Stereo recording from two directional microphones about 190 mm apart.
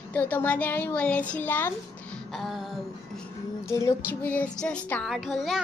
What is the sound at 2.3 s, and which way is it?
Speech, centre (ahead or behind).